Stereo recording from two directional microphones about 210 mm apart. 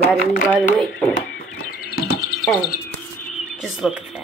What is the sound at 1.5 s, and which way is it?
Bird, 40° left (ahead or behind).